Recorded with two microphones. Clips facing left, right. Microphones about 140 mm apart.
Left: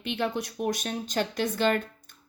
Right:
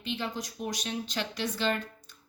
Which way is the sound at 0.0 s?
60° left (ahead or behind).